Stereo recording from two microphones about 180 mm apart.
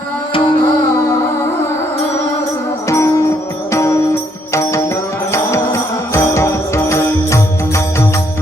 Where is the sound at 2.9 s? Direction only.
15° left (ahead or behind).